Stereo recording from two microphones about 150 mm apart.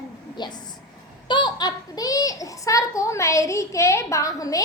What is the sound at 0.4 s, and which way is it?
A woman's voice, 30° left (ahead or behind).